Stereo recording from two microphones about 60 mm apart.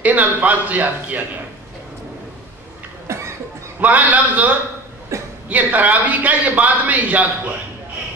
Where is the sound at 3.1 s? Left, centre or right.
Right.